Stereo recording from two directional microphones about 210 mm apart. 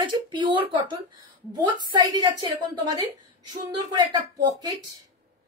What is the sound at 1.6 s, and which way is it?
A woman's voice, 20° right (ahead or behind).